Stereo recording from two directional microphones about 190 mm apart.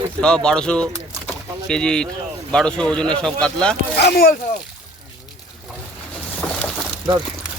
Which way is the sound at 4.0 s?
55° left (ahead or behind).